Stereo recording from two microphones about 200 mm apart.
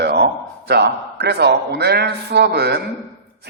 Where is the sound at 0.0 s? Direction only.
55° right (ahead or behind).